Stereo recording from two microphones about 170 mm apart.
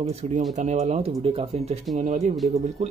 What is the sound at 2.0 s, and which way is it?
Speech, 50° right (ahead or behind).